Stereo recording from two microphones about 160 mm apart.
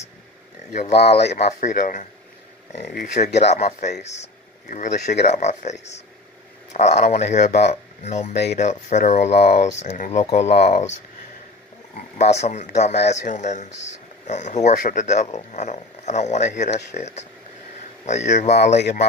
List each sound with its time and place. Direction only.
0.7 s speech: 45° left (ahead or behind)
2.8 s speech: 70° left (ahead or behind)
3.5 s speech: 45° left (ahead or behind)
12.2 s speech: 45° left (ahead or behind)